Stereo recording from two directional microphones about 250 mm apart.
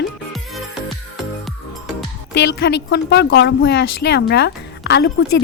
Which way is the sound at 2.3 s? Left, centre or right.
Left.